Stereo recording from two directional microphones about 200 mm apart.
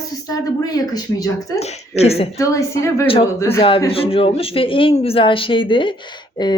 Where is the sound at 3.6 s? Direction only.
25° left (ahead or behind).